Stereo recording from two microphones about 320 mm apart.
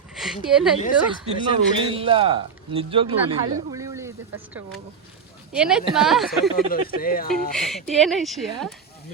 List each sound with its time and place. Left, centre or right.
0.1 s speech: centre
1.5 s a man's voice: centre
5.5 s speech: centre
6.7 s speech: left
7.5 s speech: centre